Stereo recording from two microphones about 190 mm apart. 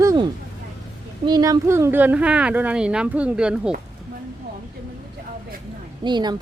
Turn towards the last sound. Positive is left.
turn(degrees=-25)  # may be behind; listen again after turning